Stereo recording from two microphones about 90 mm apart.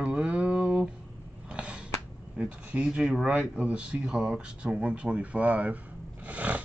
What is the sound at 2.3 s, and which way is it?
Speech, 15° right (ahead or behind).